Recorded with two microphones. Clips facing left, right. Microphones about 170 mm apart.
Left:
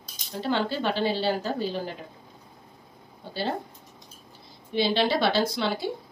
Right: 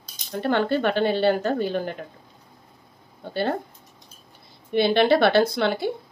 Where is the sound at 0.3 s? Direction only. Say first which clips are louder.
Right 5 dB; 55° right (ahead or behind).